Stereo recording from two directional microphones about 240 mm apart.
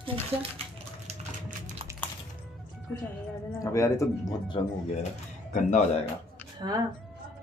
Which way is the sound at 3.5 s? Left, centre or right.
Centre.